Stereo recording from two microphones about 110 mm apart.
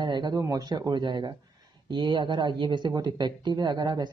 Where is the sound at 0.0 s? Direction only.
40° right (ahead or behind).